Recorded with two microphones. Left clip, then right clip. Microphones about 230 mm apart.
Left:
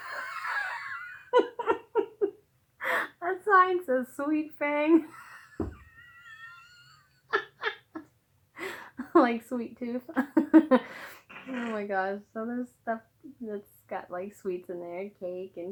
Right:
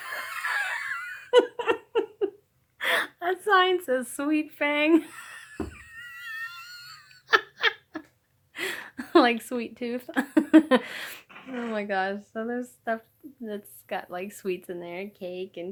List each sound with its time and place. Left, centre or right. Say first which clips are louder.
0.3 s giggle: right 4 dB; right
2.7 s a sound: right 4 dB; right
10.8 s speech: right 6 dB; right